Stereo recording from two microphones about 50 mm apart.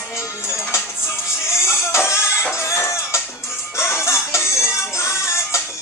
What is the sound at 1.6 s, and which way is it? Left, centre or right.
Music, left.